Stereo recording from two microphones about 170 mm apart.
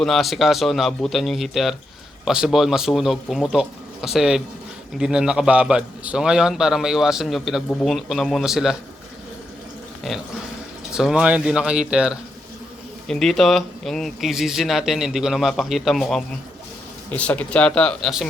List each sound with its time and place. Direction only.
0.0 s speech: centre (ahead or behind)
10.9 s speech: 5° right (ahead or behind)